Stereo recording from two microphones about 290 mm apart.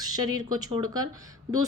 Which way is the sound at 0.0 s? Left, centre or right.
Right.